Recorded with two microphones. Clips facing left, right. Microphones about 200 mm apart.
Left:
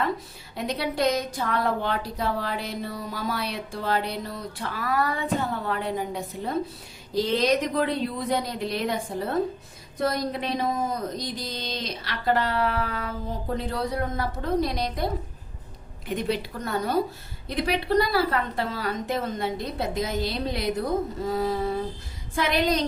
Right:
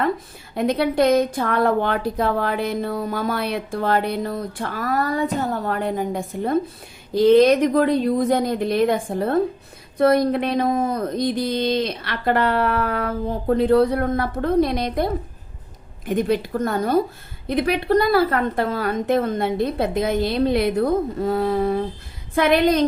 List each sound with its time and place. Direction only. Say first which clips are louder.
0.5 s a woman's voice: right 9 dB; 55° right (ahead or behind)